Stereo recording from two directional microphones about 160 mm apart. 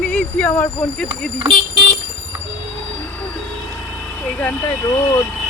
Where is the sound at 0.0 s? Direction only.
10° left (ahead or behind).